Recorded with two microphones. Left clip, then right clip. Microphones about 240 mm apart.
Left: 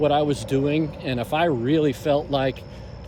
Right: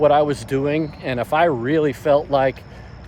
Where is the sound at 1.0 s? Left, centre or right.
Right.